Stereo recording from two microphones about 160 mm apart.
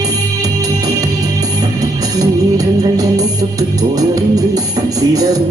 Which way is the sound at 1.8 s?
20° right (ahead or behind).